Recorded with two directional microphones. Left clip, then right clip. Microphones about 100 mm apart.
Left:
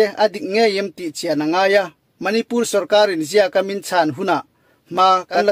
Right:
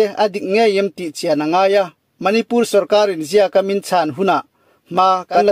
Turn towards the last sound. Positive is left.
turn(degrees=-15)  # may be behind; listen again after turning